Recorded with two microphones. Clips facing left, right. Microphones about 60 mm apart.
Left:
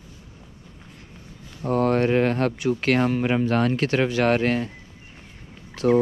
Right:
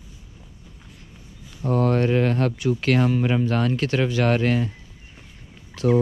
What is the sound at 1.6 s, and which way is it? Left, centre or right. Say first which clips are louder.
Speech: even; left.